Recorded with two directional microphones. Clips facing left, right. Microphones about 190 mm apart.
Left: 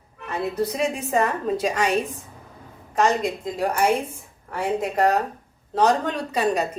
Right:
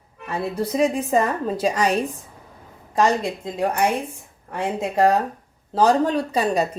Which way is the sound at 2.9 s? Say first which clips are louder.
Right 1 dB; 30° right (ahead or behind).